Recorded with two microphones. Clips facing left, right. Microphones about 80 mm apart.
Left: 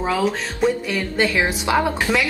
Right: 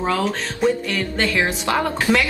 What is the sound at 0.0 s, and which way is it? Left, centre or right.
Speech, centre.